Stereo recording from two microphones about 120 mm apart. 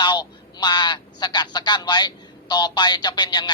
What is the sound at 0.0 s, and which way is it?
Speech, 35° left (ahead or behind).